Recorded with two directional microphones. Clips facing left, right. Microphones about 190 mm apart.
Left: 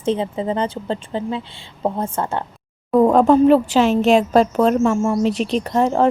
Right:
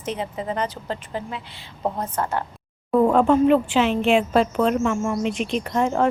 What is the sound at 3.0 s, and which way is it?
A woman's voice, 40° left (ahead or behind).